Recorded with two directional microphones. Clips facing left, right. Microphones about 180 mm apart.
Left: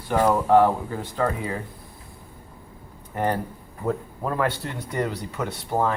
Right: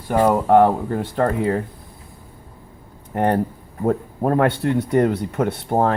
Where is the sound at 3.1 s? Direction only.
55° right (ahead or behind).